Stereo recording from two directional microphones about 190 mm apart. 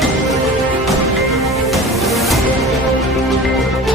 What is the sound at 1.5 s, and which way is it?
Music, centre (ahead or behind).